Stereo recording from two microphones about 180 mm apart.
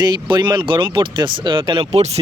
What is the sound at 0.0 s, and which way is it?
A man's voice, 25° right (ahead or behind).